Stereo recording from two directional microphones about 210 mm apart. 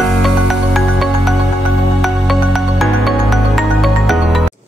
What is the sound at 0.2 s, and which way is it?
Music, centre (ahead or behind).